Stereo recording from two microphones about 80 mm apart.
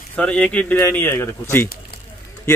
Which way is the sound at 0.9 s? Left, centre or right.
Left.